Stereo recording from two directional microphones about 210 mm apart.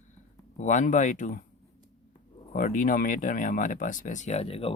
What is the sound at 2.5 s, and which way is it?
Speech, 40° left (ahead or behind).